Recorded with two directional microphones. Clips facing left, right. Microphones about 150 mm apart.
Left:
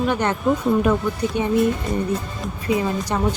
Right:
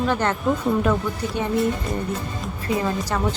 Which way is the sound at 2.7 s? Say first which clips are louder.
Left 2 dB; 20° left (ahead or behind).